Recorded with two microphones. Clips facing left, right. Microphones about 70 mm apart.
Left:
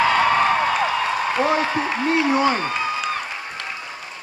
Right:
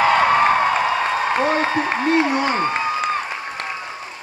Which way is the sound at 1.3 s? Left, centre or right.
Right.